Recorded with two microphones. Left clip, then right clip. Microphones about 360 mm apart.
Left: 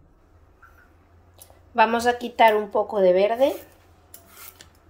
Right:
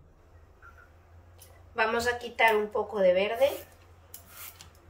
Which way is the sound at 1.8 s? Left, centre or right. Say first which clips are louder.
Left 8 dB; centre.